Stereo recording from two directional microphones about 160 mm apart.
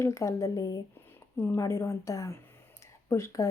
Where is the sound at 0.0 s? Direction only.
20° left (ahead or behind).